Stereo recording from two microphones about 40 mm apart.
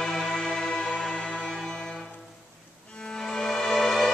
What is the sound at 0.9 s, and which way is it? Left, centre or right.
Music, left.